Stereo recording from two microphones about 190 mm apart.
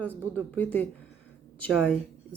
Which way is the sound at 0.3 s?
10° left (ahead or behind).